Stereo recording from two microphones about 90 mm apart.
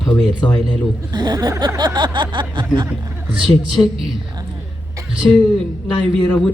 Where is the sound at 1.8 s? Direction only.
55° right (ahead or behind).